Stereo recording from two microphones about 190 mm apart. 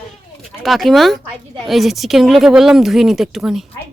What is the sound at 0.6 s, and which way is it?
Speech, centre (ahead or behind).